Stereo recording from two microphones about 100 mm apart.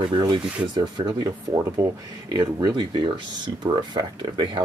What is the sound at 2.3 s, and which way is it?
Speech, 40° right (ahead or behind).